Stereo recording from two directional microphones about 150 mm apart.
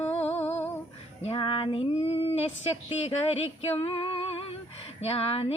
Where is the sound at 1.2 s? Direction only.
35° left (ahead or behind).